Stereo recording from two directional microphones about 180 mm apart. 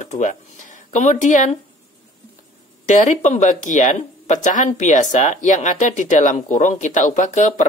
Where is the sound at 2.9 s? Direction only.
40° left (ahead or behind).